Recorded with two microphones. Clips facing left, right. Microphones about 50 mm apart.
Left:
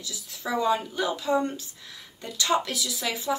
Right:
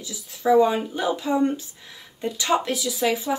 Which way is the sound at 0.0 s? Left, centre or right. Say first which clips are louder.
Right 9 dB; right.